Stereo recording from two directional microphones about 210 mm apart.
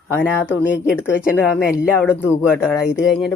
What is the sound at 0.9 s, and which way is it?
Speech, 10° left (ahead or behind).